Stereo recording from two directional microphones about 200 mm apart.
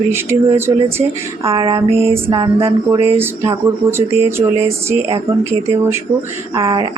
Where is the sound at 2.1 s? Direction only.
25° right (ahead or behind).